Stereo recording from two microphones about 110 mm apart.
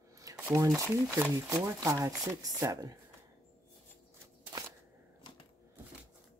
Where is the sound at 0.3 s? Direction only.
30° right (ahead or behind).